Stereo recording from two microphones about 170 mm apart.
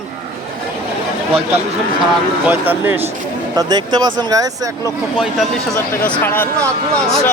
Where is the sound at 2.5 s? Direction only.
10° right (ahead or behind).